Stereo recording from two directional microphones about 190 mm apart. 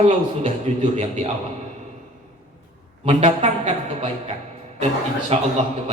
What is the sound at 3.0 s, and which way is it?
A woman's voice, 35° right (ahead or behind).